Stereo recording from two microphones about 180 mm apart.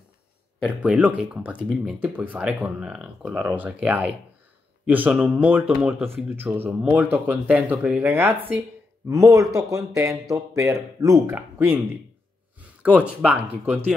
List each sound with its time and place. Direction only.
0.6 s speech: 5° right (ahead or behind)